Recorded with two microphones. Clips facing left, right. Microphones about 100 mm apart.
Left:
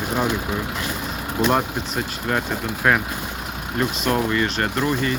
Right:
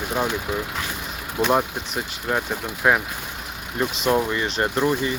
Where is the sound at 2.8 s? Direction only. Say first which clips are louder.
Even; 10° right (ahead or behind).